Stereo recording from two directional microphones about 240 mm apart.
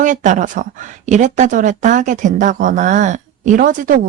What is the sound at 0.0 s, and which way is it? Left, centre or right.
Speech, right.